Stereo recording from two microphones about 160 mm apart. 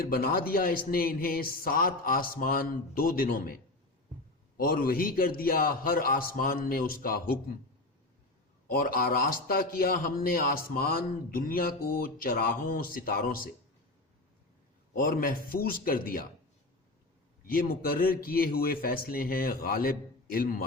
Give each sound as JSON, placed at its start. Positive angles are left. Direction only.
{"t": 0.0, "sound": "a man's voice", "side_deg": 65}
{"t": 8.7, "sound": "a man's voice", "side_deg": 65}
{"t": 14.9, "sound": "a man's voice", "side_deg": 65}
{"t": 17.4, "sound": "a man's voice", "side_deg": 65}